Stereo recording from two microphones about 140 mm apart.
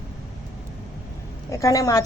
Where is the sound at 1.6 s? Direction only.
25° left (ahead or behind).